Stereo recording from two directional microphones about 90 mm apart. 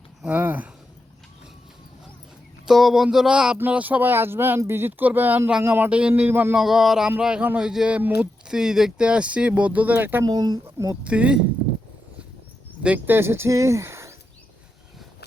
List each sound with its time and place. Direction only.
0.3 s speech: 20° right (ahead or behind)
2.6 s a sound: 5° right (ahead or behind)
3.6 s speech: 15° right (ahead or behind)
6.3 s speech: 20° right (ahead or behind)
6.6 s a sound: 5° right (ahead or behind)
7.2 s speech: 10° right (ahead or behind)
10.2 s speech: 45° right (ahead or behind)
11.0 s speech: 15° right (ahead or behind)
13.1 s speech: 25° right (ahead or behind)